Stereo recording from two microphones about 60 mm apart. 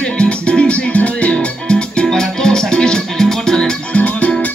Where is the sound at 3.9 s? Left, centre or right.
Left.